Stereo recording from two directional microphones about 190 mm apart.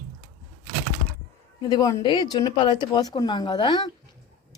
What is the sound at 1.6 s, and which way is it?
Speech, 20° left (ahead or behind).